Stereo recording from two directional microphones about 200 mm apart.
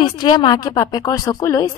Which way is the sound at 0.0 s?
20° left (ahead or behind).